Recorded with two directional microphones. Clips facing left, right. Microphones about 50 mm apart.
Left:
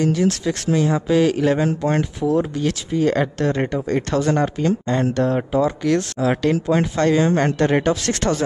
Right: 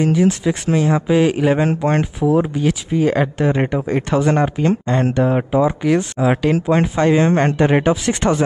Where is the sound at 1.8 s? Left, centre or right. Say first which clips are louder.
Right 3 dB; right.